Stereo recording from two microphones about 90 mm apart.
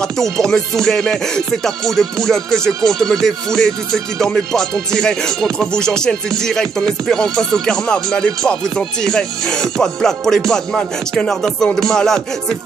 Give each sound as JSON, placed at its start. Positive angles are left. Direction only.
{"t": 0.0, "sound": "music", "side_deg": 5}